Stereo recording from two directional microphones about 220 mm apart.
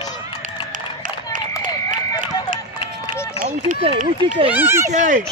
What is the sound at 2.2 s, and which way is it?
Music, 35° right (ahead or behind).